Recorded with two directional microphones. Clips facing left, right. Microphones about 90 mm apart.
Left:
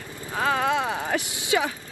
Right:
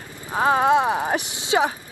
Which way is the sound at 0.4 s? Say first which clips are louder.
Right 6 dB; 30° right (ahead or behind).